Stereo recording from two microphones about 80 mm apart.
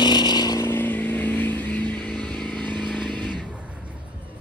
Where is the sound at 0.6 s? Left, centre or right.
Left; by 2.7 s centre.